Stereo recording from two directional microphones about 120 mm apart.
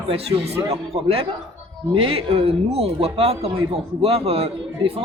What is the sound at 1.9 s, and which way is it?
Speech, 50° right (ahead or behind).